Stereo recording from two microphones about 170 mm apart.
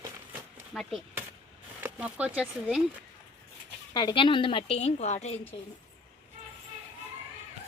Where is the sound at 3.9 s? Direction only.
25° left (ahead or behind).